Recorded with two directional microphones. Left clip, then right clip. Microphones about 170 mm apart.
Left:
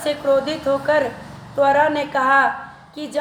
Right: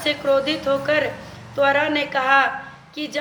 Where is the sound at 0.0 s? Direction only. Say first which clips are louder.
Left 1 dB; 25° left (ahead or behind).